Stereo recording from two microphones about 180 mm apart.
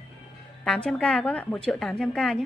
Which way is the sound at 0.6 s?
5° left (ahead or behind).